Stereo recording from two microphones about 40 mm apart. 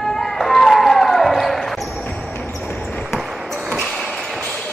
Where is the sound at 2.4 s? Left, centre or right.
Left.